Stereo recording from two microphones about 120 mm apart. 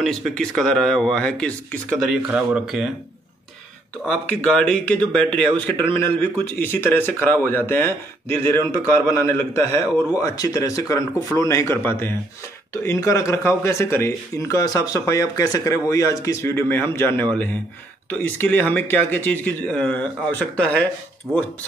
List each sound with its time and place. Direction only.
0.0 s speech: 5° left (ahead or behind)
2.2 s speech: 10° right (ahead or behind)
4.4 s a man's voice: 5° left (ahead or behind)